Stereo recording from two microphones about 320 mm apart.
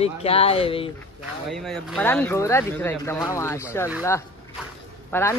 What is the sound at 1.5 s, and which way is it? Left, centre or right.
Speech, centre.